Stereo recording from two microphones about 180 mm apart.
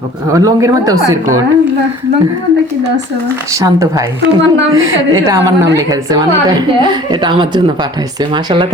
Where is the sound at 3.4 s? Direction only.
20° right (ahead or behind).